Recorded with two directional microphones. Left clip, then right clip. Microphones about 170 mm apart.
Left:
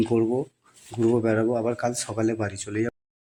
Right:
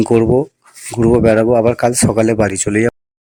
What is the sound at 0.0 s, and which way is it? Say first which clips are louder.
Speech: right 11 dB; 45° right (ahead or behind).